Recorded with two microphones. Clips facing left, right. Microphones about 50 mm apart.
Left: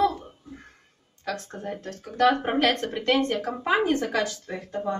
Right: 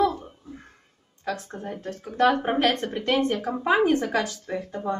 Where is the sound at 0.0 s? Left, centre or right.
Centre.